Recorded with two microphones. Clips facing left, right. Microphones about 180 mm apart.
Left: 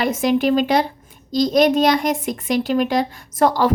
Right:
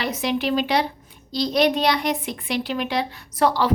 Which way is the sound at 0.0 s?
45° left (ahead or behind).